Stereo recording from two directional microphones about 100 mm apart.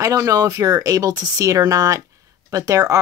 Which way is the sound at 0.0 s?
35° right (ahead or behind).